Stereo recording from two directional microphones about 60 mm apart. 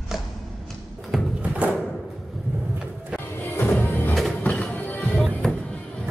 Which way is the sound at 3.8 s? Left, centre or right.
Left.